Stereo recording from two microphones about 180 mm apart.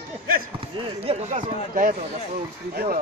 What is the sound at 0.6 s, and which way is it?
Speech, 35° right (ahead or behind).